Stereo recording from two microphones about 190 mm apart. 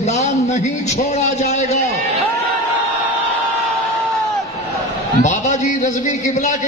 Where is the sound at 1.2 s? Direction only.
35° left (ahead or behind).